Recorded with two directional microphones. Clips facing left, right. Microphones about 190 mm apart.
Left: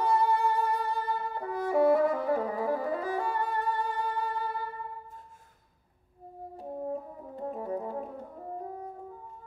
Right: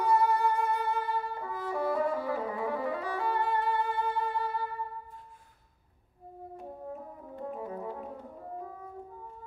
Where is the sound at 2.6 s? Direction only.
40° left (ahead or behind).